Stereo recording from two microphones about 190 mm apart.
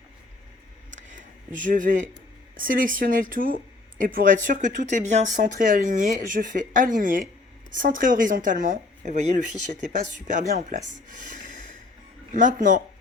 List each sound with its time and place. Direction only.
0.9 s a sound: 40° right (ahead or behind)
2.6 s speech: 45° right (ahead or behind)
11.2 s snort: 40° right (ahead or behind)
12.3 s speech: 40° right (ahead or behind)